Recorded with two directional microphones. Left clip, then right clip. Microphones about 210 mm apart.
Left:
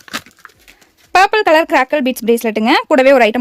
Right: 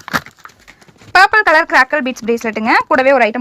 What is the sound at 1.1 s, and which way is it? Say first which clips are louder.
Speech: right 1 dB; 30° left (ahead or behind).